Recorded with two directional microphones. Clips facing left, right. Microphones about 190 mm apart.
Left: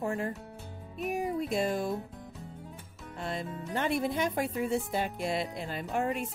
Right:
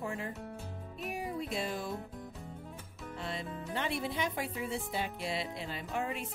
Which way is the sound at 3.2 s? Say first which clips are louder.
Left 4 dB; 45° left (ahead or behind).